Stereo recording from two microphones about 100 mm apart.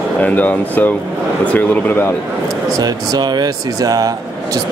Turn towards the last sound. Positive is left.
turn(degrees=-35)  # may be behind; listen again after turning